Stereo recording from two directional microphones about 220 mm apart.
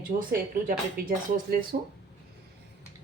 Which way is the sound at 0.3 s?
40° right (ahead or behind).